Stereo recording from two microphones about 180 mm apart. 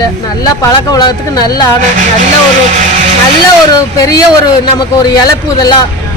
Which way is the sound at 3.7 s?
20° left (ahead or behind).